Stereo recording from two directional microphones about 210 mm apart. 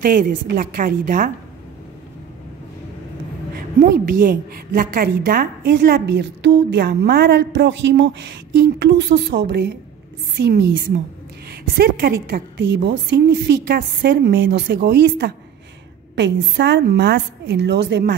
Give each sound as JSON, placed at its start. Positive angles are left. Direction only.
{"t": 0.0, "sound": "a woman's voice", "side_deg": -40}
{"t": 3.5, "sound": "a woman's voice", "side_deg": -45}